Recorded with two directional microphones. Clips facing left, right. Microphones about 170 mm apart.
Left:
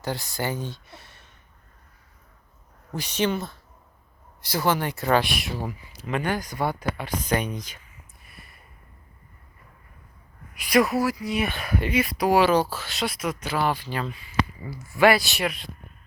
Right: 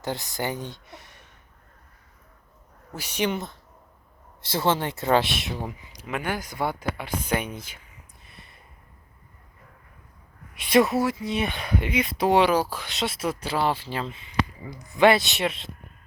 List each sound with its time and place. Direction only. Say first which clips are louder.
0.0 s speech: even; 20° right (ahead or behind)
2.9 s speech: left 2 dB; 10° right (ahead or behind)
6.1 s speech: left 3 dB; 10° right (ahead or behind)
10.6 s speech: right 1 dB; 25° right (ahead or behind)